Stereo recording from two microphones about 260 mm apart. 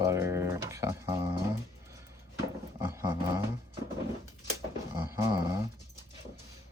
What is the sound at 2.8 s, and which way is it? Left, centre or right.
Roaring cats, centre.